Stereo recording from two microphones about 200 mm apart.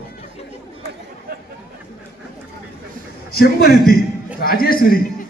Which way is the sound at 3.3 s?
55° left (ahead or behind).